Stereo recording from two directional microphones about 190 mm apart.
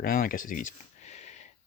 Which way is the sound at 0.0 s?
50° left (ahead or behind).